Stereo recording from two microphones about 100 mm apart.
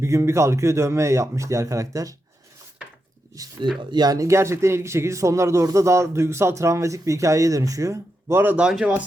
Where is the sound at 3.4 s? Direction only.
35° right (ahead or behind).